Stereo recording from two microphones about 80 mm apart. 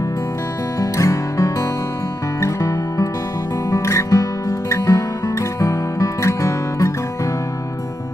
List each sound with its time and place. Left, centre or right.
0.7 s music: left